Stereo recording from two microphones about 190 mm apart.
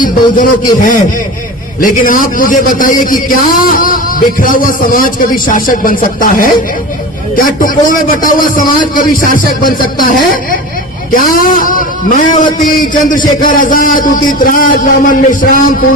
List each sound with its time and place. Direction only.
0.3 s a man's voice: 45° left (ahead or behind)